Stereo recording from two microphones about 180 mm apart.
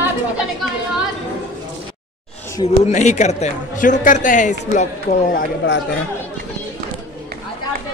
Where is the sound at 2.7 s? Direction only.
40° left (ahead or behind).